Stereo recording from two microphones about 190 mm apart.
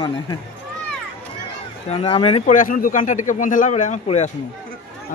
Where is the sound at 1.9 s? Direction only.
30° left (ahead or behind).